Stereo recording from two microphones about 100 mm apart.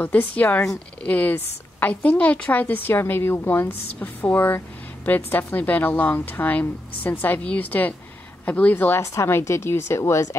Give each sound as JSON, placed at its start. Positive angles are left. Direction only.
{"t": 0.0, "sound": "a woman's voice", "side_deg": 15}